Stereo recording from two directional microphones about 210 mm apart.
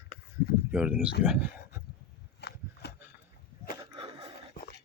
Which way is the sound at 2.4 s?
50° left (ahead or behind).